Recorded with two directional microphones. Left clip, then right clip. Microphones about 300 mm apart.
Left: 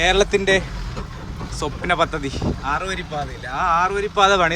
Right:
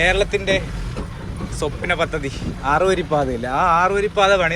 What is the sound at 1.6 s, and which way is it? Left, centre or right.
Speech, centre.